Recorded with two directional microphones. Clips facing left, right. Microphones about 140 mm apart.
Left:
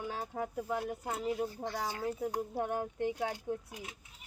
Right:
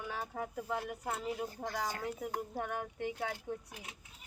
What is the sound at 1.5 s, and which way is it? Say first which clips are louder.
Speech: left 1 dB; 45° right (ahead or behind).